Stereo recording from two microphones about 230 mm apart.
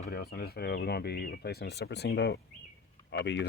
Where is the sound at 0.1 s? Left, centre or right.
Left.